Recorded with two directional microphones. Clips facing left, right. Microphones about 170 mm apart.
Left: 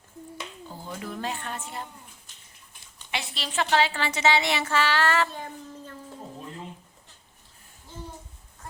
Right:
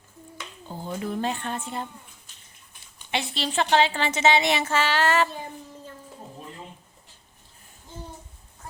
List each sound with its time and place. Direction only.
0.7 s speech: 25° right (ahead or behind)
3.1 s a woman's voice: 30° right (ahead or behind)